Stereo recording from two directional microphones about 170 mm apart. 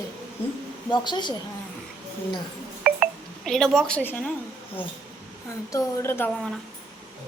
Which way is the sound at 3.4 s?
Centre (ahead or behind).